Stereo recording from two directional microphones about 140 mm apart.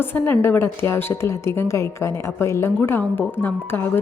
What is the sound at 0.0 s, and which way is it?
A woman's voice, 15° left (ahead or behind).